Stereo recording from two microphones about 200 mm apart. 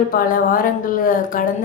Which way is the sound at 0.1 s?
45° left (ahead or behind).